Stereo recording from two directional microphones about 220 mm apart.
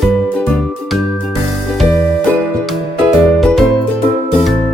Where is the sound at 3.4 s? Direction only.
Centre (ahead or behind).